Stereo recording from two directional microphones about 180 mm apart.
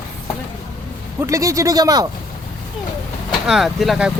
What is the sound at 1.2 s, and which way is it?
Speech, 15° right (ahead or behind).